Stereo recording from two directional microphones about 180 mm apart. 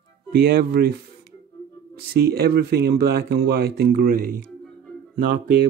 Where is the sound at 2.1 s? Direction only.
60° right (ahead or behind).